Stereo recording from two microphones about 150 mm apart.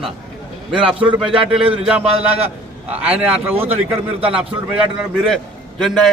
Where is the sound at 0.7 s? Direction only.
5° right (ahead or behind).